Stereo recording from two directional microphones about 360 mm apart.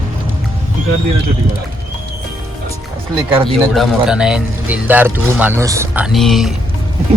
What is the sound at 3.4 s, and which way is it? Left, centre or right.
A man's voice, centre.